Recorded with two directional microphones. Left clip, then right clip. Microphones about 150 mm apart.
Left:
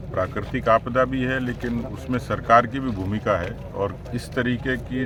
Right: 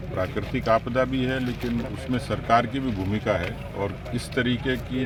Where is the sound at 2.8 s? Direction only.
15° left (ahead or behind).